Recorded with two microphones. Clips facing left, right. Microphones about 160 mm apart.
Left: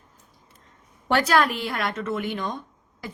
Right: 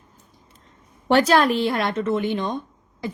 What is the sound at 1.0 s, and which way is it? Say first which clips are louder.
A woman's voice: right 4 dB; 25° right (ahead or behind).